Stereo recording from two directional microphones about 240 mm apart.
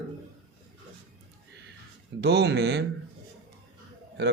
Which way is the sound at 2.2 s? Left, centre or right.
Right.